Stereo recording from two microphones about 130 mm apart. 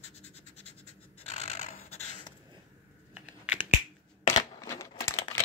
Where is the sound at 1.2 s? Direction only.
55° left (ahead or behind).